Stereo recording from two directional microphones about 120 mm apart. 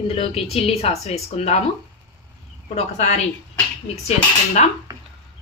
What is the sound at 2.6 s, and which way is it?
Speech, 65° left (ahead or behind).